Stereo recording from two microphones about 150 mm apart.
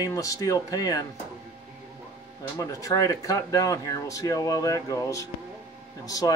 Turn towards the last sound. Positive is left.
turn(degrees=25)  # may be behind; listen again after turning